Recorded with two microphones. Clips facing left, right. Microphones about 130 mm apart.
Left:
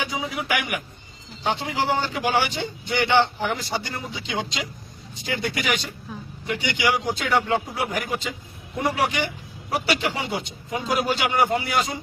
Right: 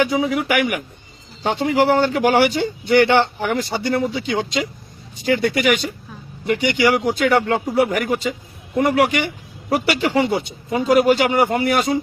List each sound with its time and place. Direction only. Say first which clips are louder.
0.0 s a man's voice: right 10 dB; 55° right (ahead or behind)
5.2 s a man's voice: right 9 dB; 60° right (ahead or behind)